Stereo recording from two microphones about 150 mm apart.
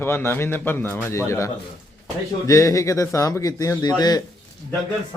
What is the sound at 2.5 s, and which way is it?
Speech, 20° left (ahead or behind).